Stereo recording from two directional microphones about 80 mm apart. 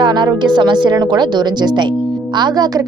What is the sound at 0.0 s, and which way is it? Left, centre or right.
A woman's voice, right.